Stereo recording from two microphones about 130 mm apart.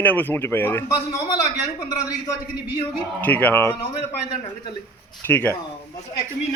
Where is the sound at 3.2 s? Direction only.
15° left (ahead or behind).